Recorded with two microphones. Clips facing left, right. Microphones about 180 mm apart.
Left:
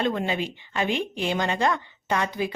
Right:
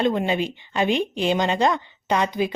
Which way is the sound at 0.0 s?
20° right (ahead or behind).